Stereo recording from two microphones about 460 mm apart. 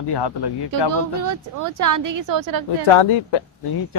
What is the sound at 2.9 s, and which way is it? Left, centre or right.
Speech, left.